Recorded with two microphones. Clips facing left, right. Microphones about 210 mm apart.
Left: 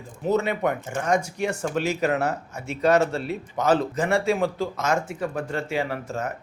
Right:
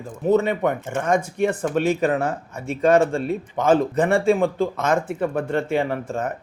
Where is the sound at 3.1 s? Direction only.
50° right (ahead or behind).